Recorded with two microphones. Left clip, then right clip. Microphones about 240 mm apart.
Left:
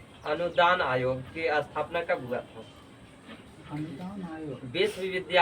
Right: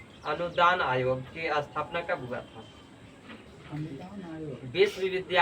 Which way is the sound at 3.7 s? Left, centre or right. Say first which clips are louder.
Left 3 dB; left.